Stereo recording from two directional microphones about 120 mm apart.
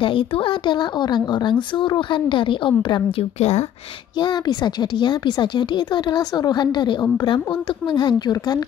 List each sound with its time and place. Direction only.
0.0 s speech: 50° left (ahead or behind)
3.3 s a woman's voice: 65° left (ahead or behind)
4.2 s speech: 35° left (ahead or behind)